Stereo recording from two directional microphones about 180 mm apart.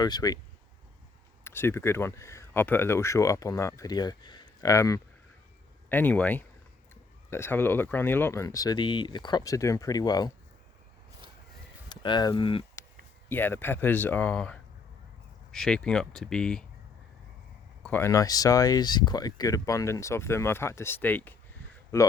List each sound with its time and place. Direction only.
0.0 s speech: 20° left (ahead or behind)
1.5 s speech: 15° left (ahead or behind)
11.9 s speech: 25° left (ahead or behind)
13.2 s speech: 10° left (ahead or behind)
17.8 s speech: 10° left (ahead or behind)